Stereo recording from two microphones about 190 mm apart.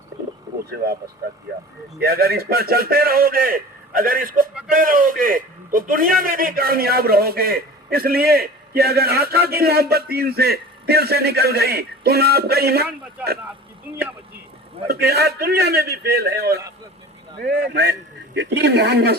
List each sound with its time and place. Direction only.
2.0 s a man's voice: 55° right (ahead or behind)
14.8 s a man's voice: 60° right (ahead or behind)